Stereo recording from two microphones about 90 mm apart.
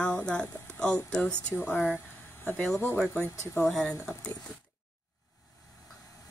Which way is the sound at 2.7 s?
25° left (ahead or behind).